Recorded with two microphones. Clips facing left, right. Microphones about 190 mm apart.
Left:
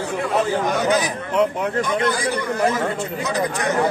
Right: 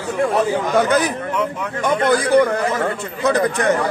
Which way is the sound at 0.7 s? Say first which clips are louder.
Right 4 dB; 55° right (ahead or behind).